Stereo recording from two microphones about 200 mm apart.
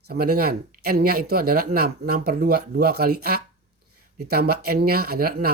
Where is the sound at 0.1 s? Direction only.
50° right (ahead or behind).